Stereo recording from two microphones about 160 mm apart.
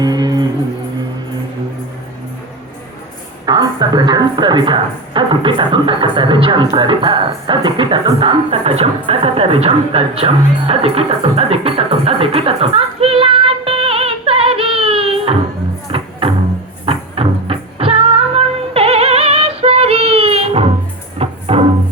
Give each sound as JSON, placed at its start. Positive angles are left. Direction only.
{"t": 0.0, "sound": "music", "side_deg": -25}
{"t": 3.4, "sound": "a woman's voice", "side_deg": -25}
{"t": 15.9, "sound": "music", "side_deg": -35}